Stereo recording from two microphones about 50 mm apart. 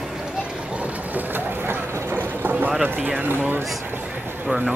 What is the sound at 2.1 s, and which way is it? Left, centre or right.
Vehicle, right.